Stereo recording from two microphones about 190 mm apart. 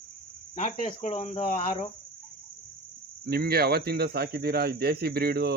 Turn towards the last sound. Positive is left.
turn(degrees=-55)  # may be behind; listen again after turning